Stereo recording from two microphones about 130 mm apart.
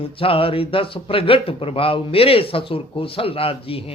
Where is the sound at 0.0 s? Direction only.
45° left (ahead or behind).